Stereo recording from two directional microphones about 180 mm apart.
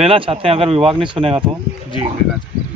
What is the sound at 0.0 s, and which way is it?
Speech, 30° right (ahead or behind).